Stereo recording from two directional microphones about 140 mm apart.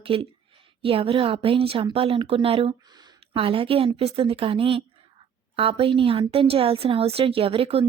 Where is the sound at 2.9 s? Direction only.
30° right (ahead or behind).